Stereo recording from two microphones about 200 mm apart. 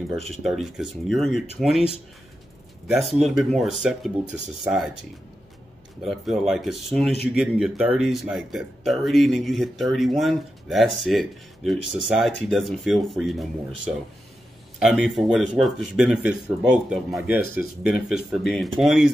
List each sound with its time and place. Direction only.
0.1 s speech: centre (ahead or behind)
2.9 s speech: centre (ahead or behind)
6.0 s speech: centre (ahead or behind)
17.3 s speech: 50° left (ahead or behind)
17.8 s speech: centre (ahead or behind)